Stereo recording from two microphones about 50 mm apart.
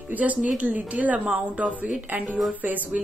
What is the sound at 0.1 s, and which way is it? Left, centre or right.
A woman's voice, right.